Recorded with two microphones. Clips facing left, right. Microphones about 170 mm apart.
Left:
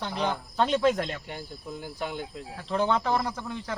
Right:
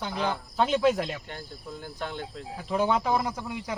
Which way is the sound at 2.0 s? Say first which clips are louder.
Left 2 dB; 10° left (ahead or behind).